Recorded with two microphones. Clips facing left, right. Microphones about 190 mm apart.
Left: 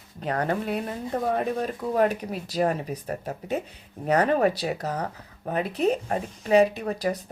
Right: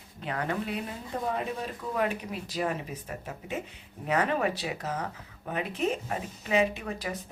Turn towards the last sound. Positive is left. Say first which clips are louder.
# left 7 dB
turn(degrees=40)  # may be behind; listen again after turning